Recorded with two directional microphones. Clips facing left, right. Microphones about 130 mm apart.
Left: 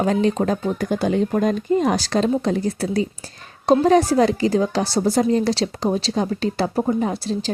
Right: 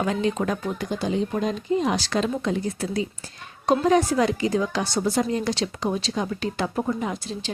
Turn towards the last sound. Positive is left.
turn(degrees=35)  # may be behind; listen again after turning